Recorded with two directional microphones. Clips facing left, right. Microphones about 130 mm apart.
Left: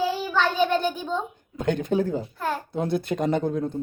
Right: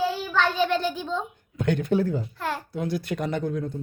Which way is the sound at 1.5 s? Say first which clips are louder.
Even; 20° left (ahead or behind).